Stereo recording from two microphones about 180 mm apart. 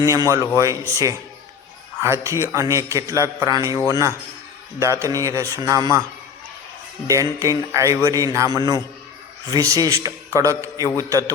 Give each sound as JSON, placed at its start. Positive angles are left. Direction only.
{"t": 0.0, "sound": "a man's voice", "side_deg": -15}
{"t": 7.1, "sound": "a man's voice", "side_deg": -15}